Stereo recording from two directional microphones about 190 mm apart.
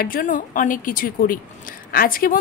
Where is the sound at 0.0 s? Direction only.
45° left (ahead or behind).